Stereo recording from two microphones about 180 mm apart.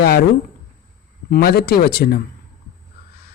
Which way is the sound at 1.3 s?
60° left (ahead or behind).